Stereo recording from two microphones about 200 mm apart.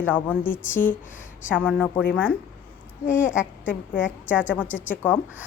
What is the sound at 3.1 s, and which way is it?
Speech, 40° left (ahead or behind).